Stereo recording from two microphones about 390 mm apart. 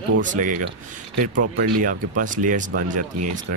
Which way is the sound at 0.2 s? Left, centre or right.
Centre.